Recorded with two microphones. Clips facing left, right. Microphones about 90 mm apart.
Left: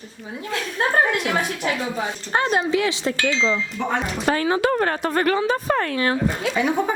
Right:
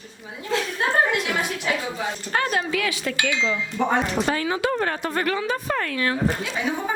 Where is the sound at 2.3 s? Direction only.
25° left (ahead or behind).